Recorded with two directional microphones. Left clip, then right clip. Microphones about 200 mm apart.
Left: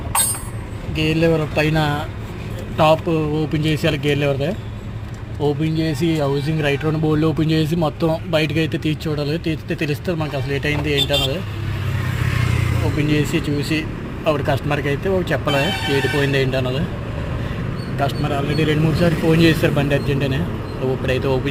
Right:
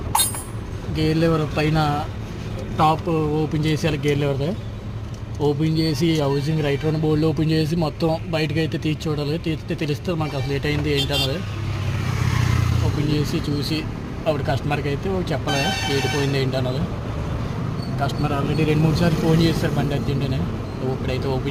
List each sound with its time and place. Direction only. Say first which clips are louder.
0.9 s speech: left 3 dB; 10° right (ahead or behind)
5.4 s speech: left 1 dB; 10° right (ahead or behind)
13.1 s speech: left 4 dB; centre (ahead or behind)
18.0 s speech: left 3 dB; centre (ahead or behind)